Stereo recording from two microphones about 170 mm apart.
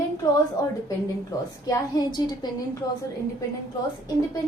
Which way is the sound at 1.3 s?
20° left (ahead or behind).